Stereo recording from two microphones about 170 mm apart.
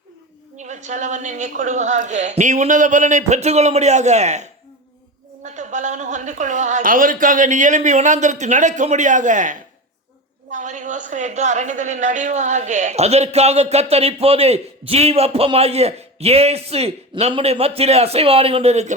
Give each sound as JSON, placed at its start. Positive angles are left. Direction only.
{"t": 0.5, "sound": "a woman's voice", "side_deg": -45}